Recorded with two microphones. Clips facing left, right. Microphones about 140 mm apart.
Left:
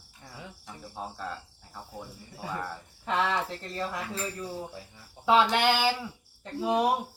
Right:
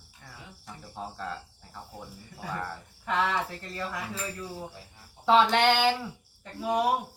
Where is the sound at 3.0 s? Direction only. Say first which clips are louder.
Even; 25° left (ahead or behind).